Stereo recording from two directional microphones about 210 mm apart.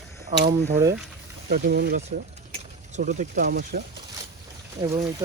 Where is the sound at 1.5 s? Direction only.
50° right (ahead or behind).